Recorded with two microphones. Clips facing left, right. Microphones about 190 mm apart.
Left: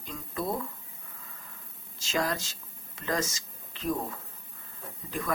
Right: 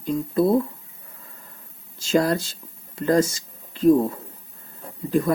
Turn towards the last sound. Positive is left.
turn(degrees=-35)  # may be behind; listen again after turning